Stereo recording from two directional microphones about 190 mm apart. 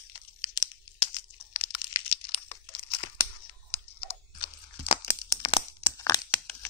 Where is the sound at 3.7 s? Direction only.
30° left (ahead or behind).